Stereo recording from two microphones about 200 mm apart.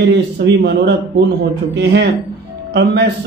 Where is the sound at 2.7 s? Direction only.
60° right (ahead or behind).